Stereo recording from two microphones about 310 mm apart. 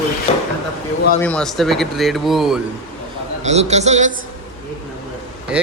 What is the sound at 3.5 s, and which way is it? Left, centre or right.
Speech, right.